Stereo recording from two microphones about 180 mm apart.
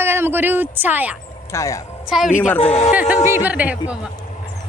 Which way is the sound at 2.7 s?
40° left (ahead or behind).